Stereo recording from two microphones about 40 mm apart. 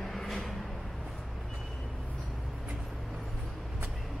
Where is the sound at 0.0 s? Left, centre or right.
Centre.